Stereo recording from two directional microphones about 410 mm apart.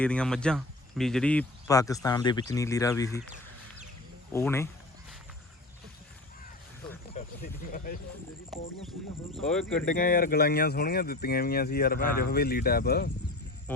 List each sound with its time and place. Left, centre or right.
0.0 s speech: centre
4.3 s speech: centre
7.1 s a sound: centre
8.5 s speech: centre
9.8 s speech: centre
13.7 s a sound: centre